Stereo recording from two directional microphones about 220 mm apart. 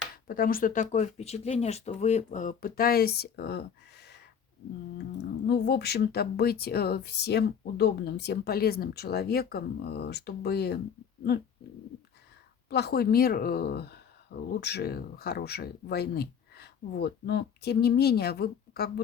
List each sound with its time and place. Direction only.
0.3 s speech: 40° left (ahead or behind)
4.9 s speech: 50° left (ahead or behind)
12.7 s speech: 45° left (ahead or behind)